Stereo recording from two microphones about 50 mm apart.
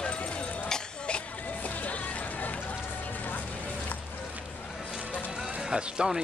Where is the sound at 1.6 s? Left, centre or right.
Left.